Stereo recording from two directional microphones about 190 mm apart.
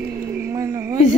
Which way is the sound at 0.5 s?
20° right (ahead or behind).